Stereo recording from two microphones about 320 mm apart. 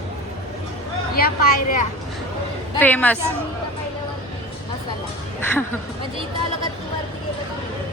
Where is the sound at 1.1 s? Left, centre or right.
Left.